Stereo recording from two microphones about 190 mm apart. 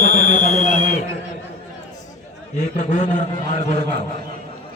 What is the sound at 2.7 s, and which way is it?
A man's voice, 40° left (ahead or behind).